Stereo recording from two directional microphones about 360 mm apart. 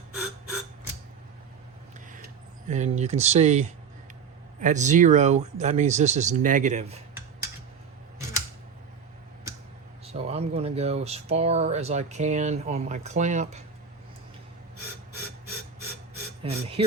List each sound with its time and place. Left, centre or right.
2.6 s speech: centre
10.1 s speech: centre
16.4 s speech: centre